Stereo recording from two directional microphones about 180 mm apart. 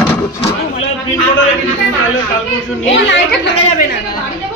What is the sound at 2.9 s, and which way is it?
Speech, 80° left.